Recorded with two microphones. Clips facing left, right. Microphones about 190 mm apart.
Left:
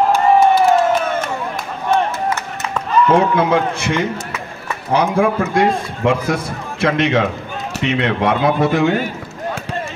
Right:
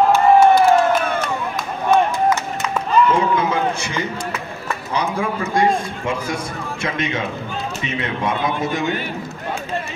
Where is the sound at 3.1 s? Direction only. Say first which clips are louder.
Left 4 dB; 60° left (ahead or behind).